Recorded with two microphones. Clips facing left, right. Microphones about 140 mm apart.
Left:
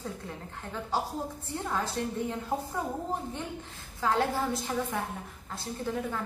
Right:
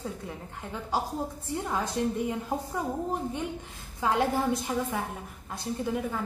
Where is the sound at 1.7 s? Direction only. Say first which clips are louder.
Right 3 dB; 15° right (ahead or behind).